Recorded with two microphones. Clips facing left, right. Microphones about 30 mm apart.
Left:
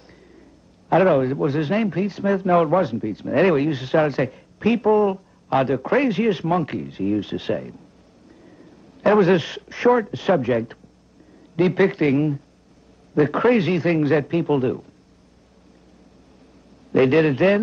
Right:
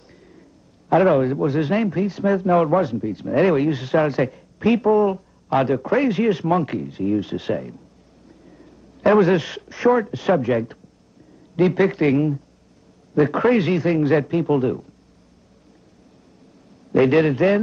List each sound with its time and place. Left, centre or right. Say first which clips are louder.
0.1 s a sound: right 2 dB; centre
1.0 s speech: right 1 dB; centre
5.8 s a man's voice: even; centre
8.5 s a sound: even; centre
9.2 s speech: even; centre
13.1 s a man's voice: even; centre
16.9 s speech: even; centre
17.3 s a man's voice: even; left